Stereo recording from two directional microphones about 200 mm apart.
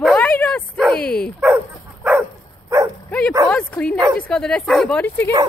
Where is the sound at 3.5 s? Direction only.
5° left (ahead or behind).